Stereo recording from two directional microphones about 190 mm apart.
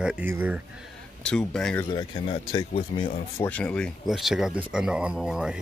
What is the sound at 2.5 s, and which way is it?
Speech, 30° left (ahead or behind).